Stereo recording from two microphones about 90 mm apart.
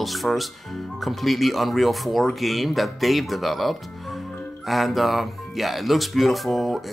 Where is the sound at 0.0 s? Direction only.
Centre (ahead or behind).